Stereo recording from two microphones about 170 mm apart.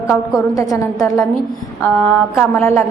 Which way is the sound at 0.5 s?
20° left (ahead or behind).